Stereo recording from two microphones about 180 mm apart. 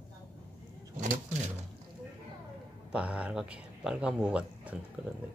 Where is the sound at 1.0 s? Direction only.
40° right (ahead or behind).